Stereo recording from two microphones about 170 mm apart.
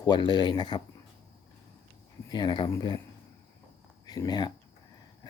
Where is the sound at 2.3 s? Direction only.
25° left (ahead or behind).